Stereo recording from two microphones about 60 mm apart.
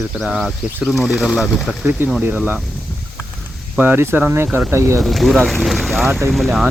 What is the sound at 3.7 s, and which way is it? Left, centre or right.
Speech, right.